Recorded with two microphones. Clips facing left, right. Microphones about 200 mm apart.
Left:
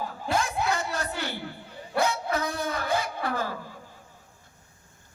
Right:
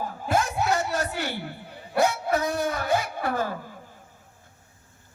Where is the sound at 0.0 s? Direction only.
45° right (ahead or behind).